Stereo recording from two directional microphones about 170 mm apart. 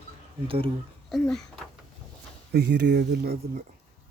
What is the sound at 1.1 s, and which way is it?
Speech, centre (ahead or behind).